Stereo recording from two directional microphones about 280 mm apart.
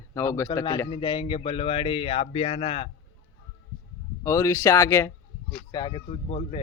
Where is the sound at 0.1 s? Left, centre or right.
Centre.